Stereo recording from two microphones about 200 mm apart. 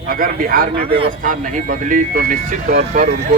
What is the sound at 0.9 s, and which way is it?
Speech, 25° right (ahead or behind).